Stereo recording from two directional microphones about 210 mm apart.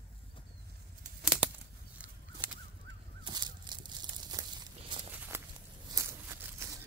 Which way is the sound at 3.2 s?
20° right (ahead or behind).